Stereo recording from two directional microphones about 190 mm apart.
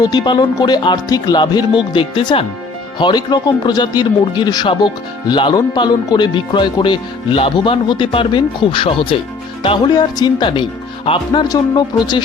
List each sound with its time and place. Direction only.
0.0 s speech: 20° left (ahead or behind)